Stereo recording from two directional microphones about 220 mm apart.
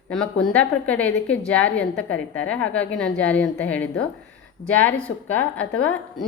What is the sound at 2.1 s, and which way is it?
Speech, 65° left (ahead or behind).